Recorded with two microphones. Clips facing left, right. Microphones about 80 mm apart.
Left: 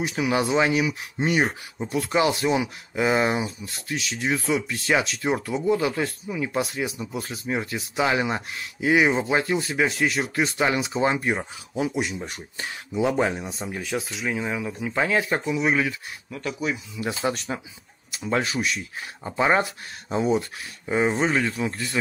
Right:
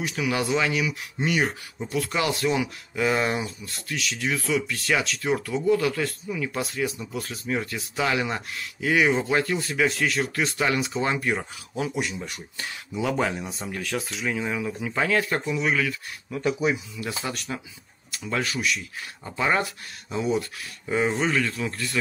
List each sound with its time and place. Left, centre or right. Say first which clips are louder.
0.0 s speech: left 3 dB; left
12.3 s speech: left 2 dB; left
17.2 s speech: left 6 dB; left
18.1 s speech: left 3 dB; left
20.8 s speech: left 2 dB; centre